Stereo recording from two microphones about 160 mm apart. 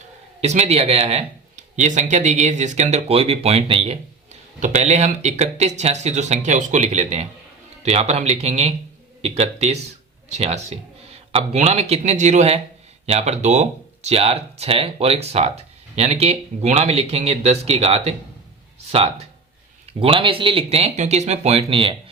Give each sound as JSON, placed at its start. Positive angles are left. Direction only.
{"t": 0.4, "sound": "speech", "side_deg": -45}